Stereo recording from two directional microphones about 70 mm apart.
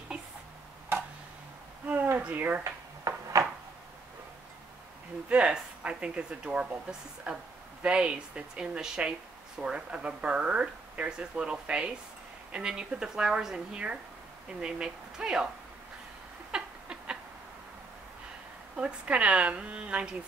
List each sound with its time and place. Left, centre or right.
2.2 s speech: right
2.6 s drawer open or close: right
5.3 s speech: centre
16.5 s a sound: centre
18.8 s speech: centre